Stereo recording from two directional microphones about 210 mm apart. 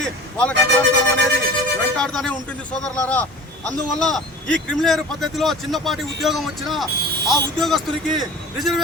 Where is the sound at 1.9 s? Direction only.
Centre (ahead or behind).